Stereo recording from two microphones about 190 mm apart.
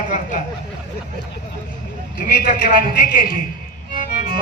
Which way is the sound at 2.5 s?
45° left (ahead or behind).